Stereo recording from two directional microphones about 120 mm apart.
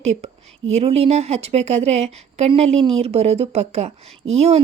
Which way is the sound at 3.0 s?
60° right (ahead or behind).